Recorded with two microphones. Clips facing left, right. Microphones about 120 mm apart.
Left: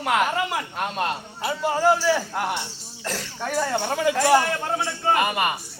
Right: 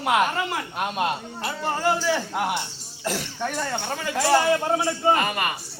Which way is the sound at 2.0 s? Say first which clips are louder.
Left 2 dB; centre (ahead or behind).